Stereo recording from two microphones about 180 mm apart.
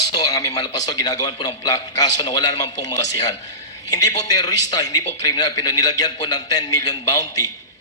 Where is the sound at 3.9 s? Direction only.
20° left (ahead or behind).